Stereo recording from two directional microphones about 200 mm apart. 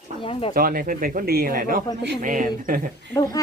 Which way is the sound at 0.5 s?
45° right (ahead or behind).